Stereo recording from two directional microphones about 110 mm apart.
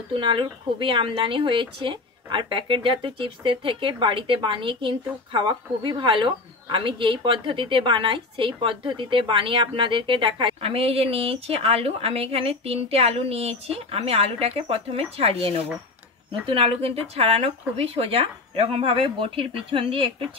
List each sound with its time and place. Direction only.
0.1 s a woman's voice: 45° right (ahead or behind)